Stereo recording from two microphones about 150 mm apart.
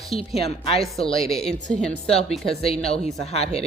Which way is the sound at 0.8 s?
Centre (ahead or behind).